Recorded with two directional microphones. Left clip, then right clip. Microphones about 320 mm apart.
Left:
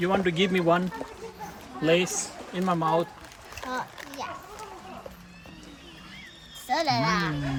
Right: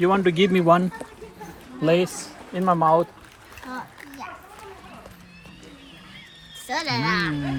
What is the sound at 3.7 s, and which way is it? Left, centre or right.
Splash, left.